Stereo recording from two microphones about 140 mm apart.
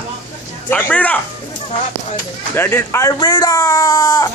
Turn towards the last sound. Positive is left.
turn(degrees=20)  # may be behind; listen again after turning